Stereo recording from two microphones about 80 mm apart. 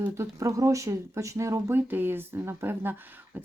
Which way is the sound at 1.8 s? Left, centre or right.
Right.